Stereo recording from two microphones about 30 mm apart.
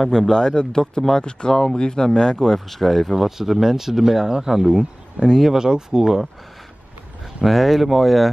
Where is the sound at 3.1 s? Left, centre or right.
Centre.